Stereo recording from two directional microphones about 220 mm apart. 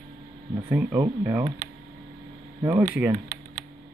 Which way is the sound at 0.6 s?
10° right (ahead or behind).